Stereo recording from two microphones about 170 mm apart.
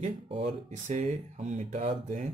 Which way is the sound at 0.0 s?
40° right (ahead or behind).